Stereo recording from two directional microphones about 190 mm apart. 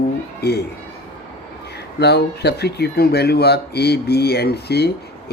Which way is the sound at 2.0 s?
60° left (ahead or behind).